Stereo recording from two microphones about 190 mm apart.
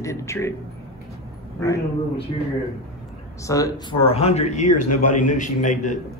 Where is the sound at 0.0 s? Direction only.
15° left (ahead or behind).